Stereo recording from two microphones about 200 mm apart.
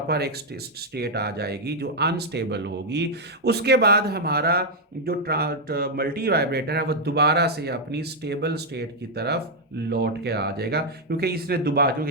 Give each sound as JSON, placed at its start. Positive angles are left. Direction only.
{"t": 0.1, "sound": "speech", "side_deg": -55}